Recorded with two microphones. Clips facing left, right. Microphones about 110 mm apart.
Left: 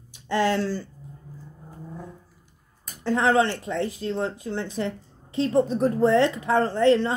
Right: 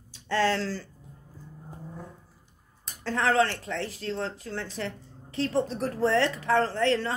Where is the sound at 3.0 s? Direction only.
15° left (ahead or behind).